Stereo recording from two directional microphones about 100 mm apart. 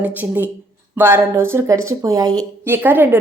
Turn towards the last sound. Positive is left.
turn(degrees=-20)  # may be behind; listen again after turning